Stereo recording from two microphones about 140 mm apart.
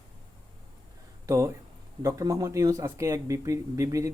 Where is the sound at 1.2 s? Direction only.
20° right (ahead or behind).